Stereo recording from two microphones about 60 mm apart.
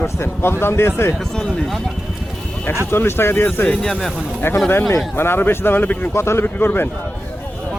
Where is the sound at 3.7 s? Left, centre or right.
Centre.